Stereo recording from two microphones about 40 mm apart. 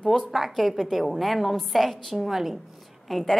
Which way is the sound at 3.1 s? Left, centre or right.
Centre.